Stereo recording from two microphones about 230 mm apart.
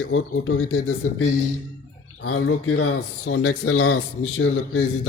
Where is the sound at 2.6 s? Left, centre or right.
Left.